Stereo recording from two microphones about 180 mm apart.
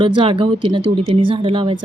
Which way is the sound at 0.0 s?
30° right (ahead or behind).